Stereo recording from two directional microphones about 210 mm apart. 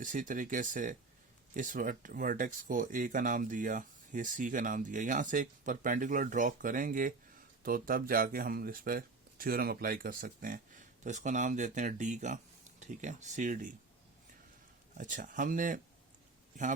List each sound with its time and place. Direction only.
0.0 s speech: 40° right (ahead or behind)
14.9 s speech: 40° right (ahead or behind)